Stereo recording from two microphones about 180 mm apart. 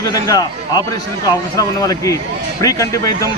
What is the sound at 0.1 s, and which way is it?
Speech, 20° left (ahead or behind).